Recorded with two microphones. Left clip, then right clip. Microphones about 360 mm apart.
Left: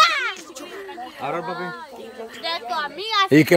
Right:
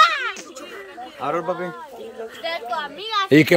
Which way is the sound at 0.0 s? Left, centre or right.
Left.